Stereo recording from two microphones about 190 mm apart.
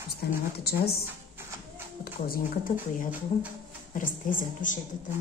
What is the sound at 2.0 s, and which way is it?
Speech, 50° left (ahead or behind).